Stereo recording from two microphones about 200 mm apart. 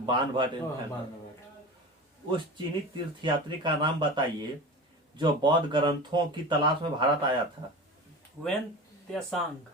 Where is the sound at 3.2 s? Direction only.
25° right (ahead or behind).